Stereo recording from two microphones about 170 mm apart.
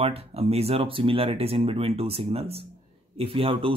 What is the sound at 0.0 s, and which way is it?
Speech, 35° right (ahead or behind).